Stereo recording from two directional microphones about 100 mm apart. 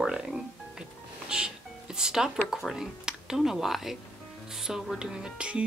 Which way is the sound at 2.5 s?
5° right (ahead or behind).